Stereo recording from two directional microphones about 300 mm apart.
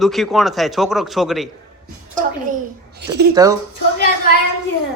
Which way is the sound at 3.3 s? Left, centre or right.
Centre.